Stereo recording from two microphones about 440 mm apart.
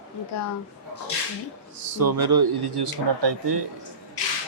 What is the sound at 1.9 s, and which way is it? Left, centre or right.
Speech, right.